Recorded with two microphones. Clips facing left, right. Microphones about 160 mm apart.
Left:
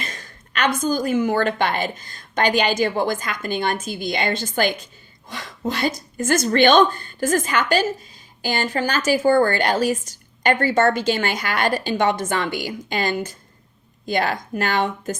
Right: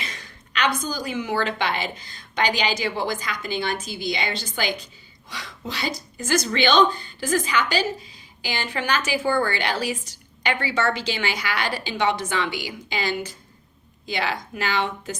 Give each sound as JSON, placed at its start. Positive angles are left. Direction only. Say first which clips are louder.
{"t": 0.0, "sound": "a woman's voice", "louder": "left 3 dB", "side_deg": 45}